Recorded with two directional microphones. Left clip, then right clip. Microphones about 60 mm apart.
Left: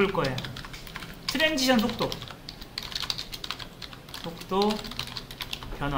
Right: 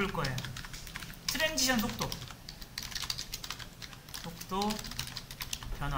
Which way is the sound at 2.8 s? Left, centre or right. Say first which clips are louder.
Left 6 dB; right.